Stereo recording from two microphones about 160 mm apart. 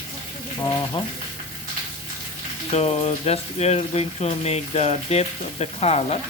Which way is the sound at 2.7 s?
40° left (ahead or behind).